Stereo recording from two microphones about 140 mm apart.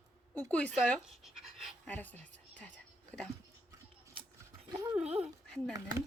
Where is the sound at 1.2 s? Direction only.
Centre (ahead or behind).